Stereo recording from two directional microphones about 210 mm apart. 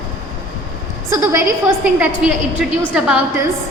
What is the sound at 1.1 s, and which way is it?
A woman's voice, 10° right (ahead or behind).